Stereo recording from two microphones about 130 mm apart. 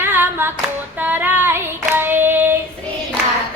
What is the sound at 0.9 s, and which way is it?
Child singing, 15° right (ahead or behind).